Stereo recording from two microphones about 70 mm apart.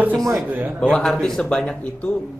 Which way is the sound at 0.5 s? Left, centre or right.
Right.